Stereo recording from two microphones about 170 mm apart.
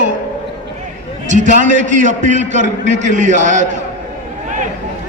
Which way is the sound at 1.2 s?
45° right (ahead or behind).